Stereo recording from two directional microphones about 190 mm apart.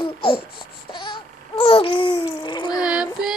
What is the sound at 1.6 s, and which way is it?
Babbling, 30° left (ahead or behind).